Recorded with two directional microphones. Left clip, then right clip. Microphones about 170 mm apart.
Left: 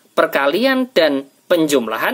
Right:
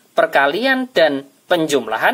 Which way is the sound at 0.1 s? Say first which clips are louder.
Right 1 dB; 40° left (ahead or behind).